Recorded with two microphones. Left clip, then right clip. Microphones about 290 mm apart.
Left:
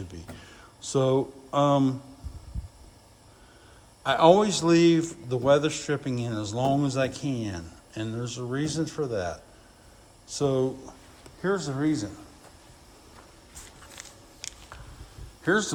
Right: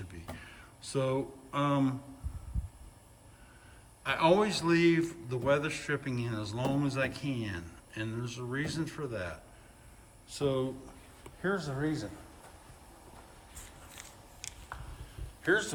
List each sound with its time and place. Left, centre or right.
0.8 s speech: centre
4.0 s a man's voice: centre
11.5 s speech: left
13.9 s a sound: left